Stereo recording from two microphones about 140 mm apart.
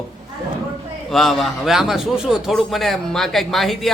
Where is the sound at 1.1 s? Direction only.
Centre (ahead or behind).